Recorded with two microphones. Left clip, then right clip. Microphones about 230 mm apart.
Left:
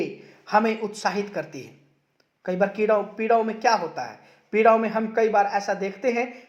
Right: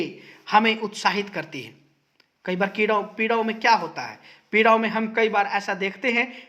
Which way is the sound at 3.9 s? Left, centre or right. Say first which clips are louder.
Even; right.